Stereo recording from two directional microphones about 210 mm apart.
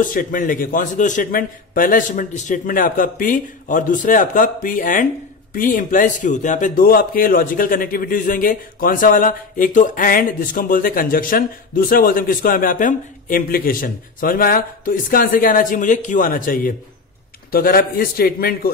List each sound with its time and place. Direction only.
0.0 s a man's voice: 40° left (ahead or behind)